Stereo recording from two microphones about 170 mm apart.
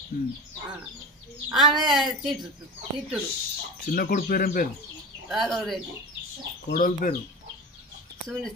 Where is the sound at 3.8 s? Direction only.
55° left (ahead or behind).